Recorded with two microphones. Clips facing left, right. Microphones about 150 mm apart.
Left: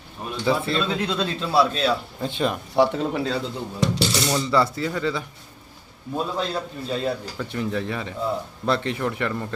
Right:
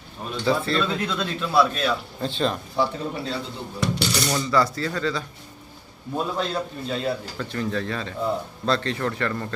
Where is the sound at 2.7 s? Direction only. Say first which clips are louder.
Left 5 dB; 75° left (ahead or behind).